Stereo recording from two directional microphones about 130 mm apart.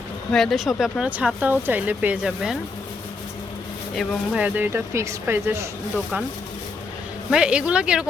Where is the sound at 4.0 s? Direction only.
10° right (ahead or behind).